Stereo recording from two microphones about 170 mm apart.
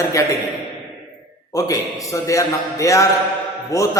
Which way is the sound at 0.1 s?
20° left (ahead or behind).